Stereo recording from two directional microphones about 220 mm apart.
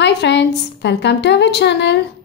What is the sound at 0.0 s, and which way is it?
A woman's voice, 55° left (ahead or behind).